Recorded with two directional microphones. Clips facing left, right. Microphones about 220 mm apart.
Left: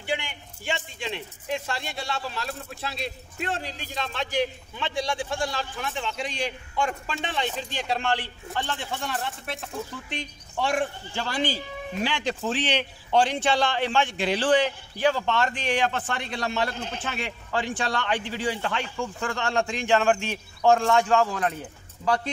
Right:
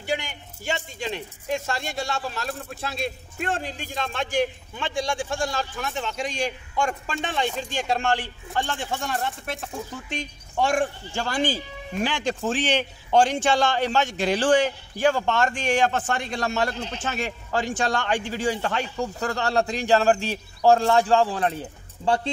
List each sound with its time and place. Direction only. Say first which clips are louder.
0.0 s speech: right 2 dB; 40° right (ahead or behind); by 22.3 s 25° right (ahead or behind)